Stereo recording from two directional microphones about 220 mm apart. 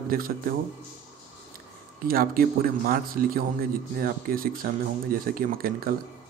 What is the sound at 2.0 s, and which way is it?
Speech, 40° right (ahead or behind).